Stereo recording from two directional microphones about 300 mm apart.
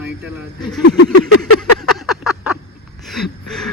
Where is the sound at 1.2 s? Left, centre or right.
Left.